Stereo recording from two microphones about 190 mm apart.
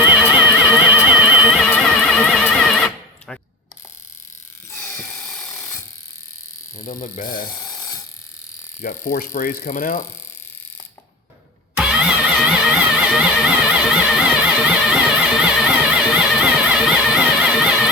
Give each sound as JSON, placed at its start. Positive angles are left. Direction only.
{"t": 0.0, "sound": "music", "side_deg": -5}
{"t": 4.7, "sound": "a sound", "side_deg": 15}
{"t": 5.2, "sound": "a sound", "side_deg": 0}
{"t": 6.7, "sound": "speech", "side_deg": 45}
{"t": 7.4, "sound": "ratchet", "side_deg": 20}
{"t": 8.8, "sound": "ratchet", "side_deg": 50}
{"t": 11.8, "sound": "music", "side_deg": -5}